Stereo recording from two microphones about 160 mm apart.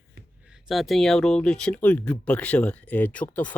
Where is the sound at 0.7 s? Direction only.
Centre (ahead or behind).